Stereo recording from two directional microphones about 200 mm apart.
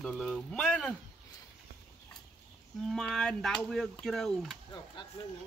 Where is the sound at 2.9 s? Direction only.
Centre (ahead or behind).